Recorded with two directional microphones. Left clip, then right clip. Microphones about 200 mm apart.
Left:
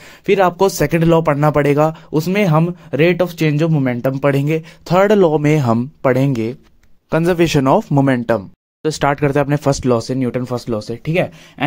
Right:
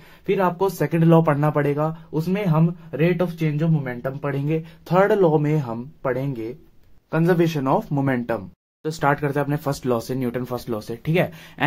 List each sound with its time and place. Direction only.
0.3 s speech: 40° left (ahead or behind)
5.0 s speech: 40° left (ahead or behind); by 11.6 s 15° left (ahead or behind)